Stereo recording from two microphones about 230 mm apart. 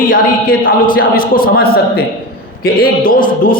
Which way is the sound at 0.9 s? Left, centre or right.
Left.